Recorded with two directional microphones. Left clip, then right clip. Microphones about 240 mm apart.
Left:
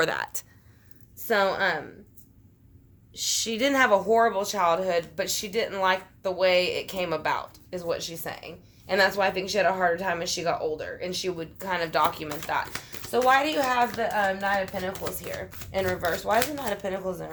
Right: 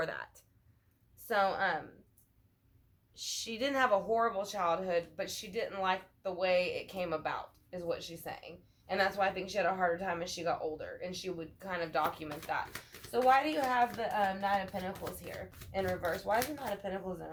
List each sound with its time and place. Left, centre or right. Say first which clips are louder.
0.0 s speech: left 12 dB; left
3.1 s a woman's voice: left 12 dB; left
15.7 s speech: left 8 dB; left